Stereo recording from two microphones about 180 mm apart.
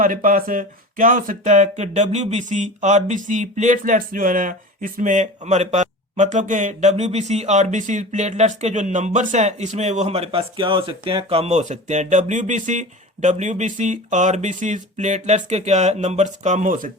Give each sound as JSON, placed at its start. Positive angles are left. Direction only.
{"t": 0.0, "sound": "speech", "side_deg": -50}